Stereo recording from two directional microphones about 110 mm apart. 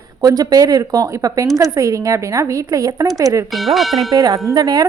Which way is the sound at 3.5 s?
Centre (ahead or behind).